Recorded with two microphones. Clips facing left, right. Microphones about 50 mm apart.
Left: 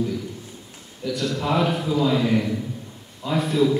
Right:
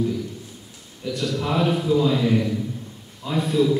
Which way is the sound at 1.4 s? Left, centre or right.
Centre.